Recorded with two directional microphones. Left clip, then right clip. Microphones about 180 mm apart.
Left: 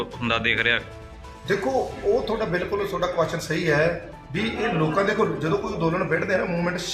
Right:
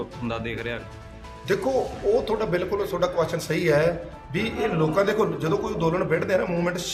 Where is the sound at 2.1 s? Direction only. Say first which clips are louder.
Right 2 dB; centre (ahead or behind).